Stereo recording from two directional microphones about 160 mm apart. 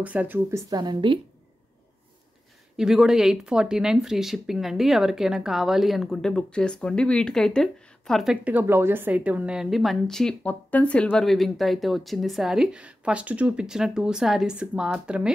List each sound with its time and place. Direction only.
0.0 s speech: 10° right (ahead or behind)
0.7 s a woman's voice: 25° right (ahead or behind)
2.8 s speech: 5° right (ahead or behind)